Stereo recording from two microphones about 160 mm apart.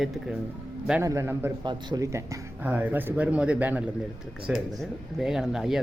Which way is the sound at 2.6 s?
10° right (ahead or behind).